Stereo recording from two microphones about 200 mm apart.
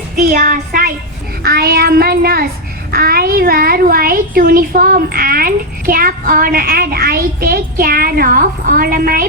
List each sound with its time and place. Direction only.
0.2 s a child's voice: 45° right (ahead or behind)